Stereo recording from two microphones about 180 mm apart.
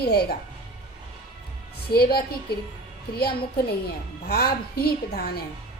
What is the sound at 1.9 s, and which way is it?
A woman's voice, 60° left (ahead or behind).